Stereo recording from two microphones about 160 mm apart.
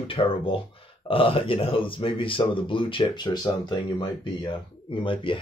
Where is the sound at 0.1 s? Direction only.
35° left (ahead or behind).